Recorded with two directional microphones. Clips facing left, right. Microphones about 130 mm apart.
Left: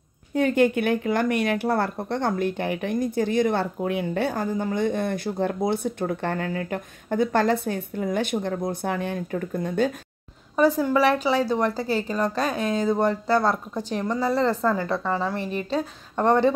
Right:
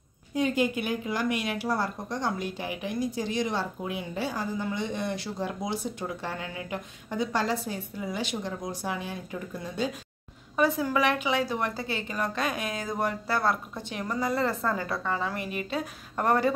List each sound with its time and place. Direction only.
0.3 s speech: 60° left (ahead or behind)
10.9 s a woman's voice: 35° left (ahead or behind)